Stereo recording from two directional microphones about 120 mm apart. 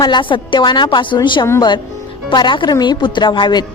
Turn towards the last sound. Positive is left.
turn(degrees=40)  # may be behind; listen again after turning